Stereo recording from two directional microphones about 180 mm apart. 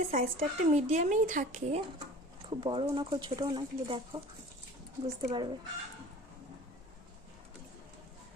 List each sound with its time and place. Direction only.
0.0 s speech: 40° right (ahead or behind)
2.5 s speech: 30° right (ahead or behind)